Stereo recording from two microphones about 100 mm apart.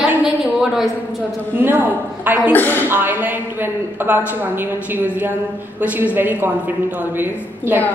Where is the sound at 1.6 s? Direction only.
20° right (ahead or behind).